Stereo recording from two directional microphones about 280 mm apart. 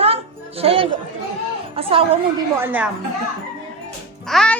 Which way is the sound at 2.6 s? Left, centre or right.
Centre.